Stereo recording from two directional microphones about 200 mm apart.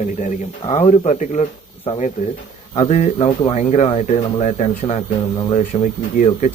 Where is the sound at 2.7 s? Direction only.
35° left (ahead or behind).